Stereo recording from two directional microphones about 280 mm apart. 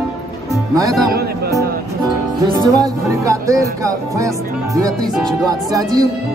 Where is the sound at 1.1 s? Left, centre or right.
Right.